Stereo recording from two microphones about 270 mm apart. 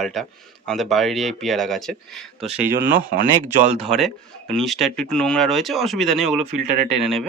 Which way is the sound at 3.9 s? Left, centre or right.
Centre.